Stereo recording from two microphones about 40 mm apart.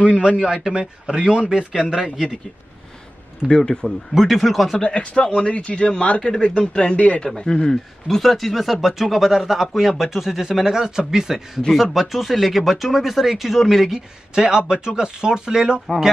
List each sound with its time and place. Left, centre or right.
0.0 s speech: right
0.4 s speech: centre
3.4 s speech: centre
3.8 s speech: centre
4.8 s speech: left
7.2 s speech: centre
8.2 s speech: centre
13.9 s speech: centre